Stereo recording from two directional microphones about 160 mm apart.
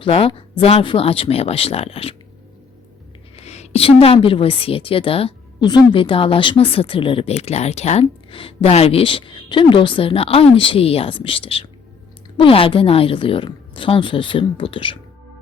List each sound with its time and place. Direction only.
0.0 s a woman's voice: 35° left (ahead or behind)
3.3 s a woman's voice: 45° left (ahead or behind)